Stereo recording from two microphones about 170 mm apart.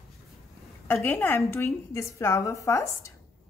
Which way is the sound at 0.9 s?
10° left (ahead or behind).